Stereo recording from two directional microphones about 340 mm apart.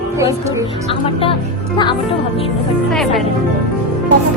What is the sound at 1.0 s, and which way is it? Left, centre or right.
Speech, centre.